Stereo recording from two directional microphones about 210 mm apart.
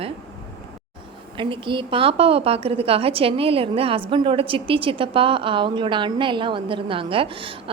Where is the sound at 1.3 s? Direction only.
25° right (ahead or behind).